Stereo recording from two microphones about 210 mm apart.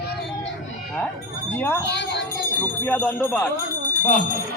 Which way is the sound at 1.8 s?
55° left (ahead or behind).